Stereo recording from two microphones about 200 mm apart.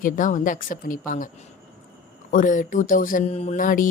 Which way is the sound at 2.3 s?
40° left (ahead or behind).